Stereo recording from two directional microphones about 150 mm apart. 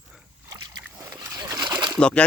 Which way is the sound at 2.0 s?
5° left (ahead or behind).